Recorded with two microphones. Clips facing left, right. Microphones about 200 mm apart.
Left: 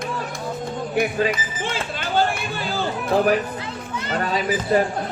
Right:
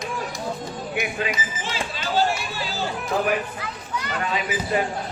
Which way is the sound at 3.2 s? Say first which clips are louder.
Left 4 dB; 25° left (ahead or behind).